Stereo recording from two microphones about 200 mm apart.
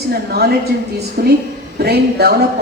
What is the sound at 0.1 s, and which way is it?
A woman's voice, 50° right (ahead or behind).